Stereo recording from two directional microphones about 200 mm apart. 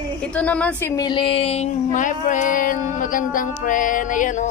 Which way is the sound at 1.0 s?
25° left (ahead or behind).